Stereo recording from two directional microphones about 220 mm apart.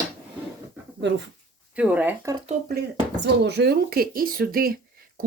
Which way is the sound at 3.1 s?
50° right (ahead or behind).